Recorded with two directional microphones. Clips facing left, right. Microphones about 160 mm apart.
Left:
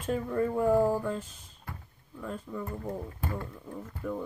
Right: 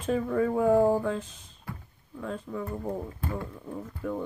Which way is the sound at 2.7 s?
15° right (ahead or behind).